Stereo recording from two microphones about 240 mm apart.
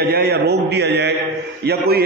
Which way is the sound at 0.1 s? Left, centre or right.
Right.